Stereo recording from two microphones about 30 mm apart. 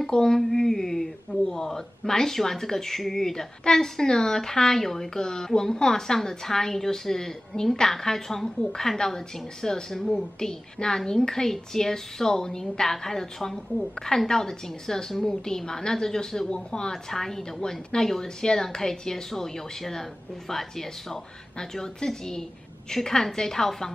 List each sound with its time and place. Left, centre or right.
0.0 s a woman's voice: left